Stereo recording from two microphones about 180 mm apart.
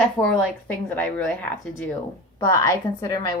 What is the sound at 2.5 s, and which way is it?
Speech, 20° left (ahead or behind).